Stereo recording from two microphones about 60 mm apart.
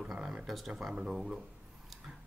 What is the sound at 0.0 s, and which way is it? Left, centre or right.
Speech, centre.